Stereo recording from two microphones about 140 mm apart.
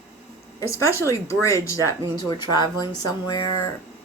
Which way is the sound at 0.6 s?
20° left (ahead or behind).